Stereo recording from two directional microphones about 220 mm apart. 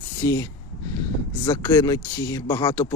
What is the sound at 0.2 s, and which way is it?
Speech, 15° left (ahead or behind).